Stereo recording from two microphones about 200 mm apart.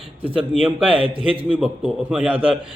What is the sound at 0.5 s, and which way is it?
A man's voice, 5° right (ahead or behind).